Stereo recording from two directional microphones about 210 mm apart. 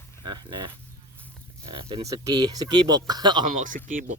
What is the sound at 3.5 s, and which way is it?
Speech, 40° right (ahead or behind).